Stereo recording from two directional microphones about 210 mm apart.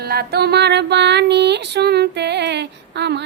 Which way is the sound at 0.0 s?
50° right (ahead or behind).